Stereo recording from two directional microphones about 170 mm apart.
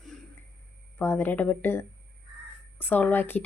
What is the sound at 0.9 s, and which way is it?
Speech, 15° left (ahead or behind).